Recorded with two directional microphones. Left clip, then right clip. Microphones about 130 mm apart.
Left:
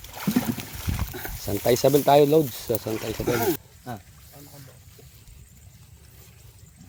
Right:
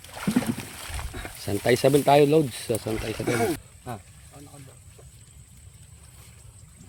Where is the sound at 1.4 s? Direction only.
25° right (ahead or behind).